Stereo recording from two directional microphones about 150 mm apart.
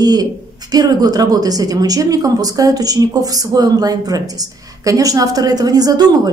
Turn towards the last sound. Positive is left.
turn(degrees=-25)  # may be behind; listen again after turning